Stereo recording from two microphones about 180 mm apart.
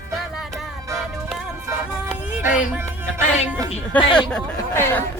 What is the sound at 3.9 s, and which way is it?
Speech, 10° left (ahead or behind).